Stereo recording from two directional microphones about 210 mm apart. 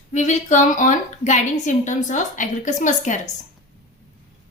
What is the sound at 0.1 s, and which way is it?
A woman's voice, 35° left (ahead or behind).